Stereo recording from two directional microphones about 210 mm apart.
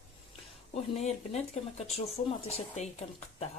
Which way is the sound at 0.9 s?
30° left (ahead or behind).